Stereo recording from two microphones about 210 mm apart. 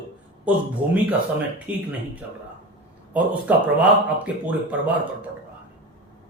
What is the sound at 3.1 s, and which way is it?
Speech, 5° right (ahead or behind).